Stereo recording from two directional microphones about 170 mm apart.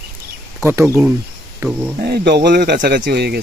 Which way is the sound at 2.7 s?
60° right (ahead or behind).